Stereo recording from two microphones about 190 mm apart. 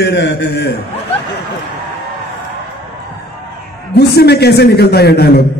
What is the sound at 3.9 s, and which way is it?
A man's voice, 55° left (ahead or behind).